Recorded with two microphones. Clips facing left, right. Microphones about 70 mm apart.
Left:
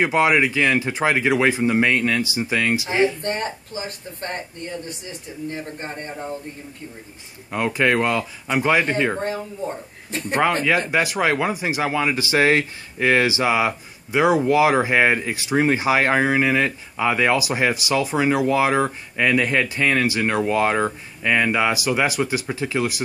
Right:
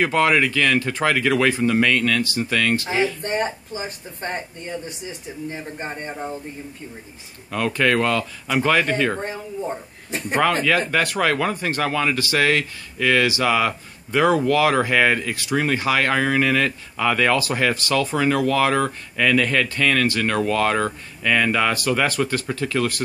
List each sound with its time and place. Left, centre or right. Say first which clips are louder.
0.0 s speech: left 1 dB; centre
3.2 s speech: right 2 dB; centre
5.5 s speech: even; centre
7.5 s speech: even; left
10.8 s speech: even; centre